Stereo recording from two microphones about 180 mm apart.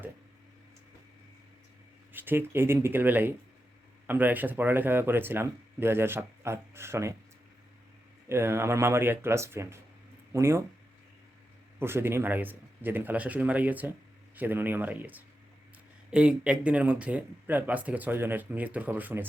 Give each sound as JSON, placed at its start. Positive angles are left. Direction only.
{"t": 2.1, "sound": "speech", "side_deg": -10}
{"t": 8.3, "sound": "speech", "side_deg": -15}
{"t": 11.8, "sound": "speech", "side_deg": -15}